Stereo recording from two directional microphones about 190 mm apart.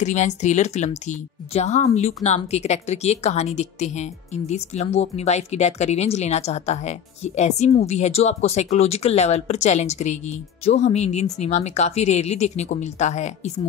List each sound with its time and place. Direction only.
0.0 s a woman's voice: 40° left (ahead or behind)